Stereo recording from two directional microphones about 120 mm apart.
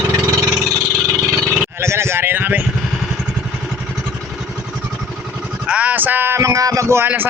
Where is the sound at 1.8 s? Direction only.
20° right (ahead or behind).